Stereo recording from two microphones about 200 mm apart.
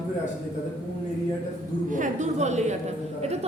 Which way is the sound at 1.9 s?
40° right (ahead or behind).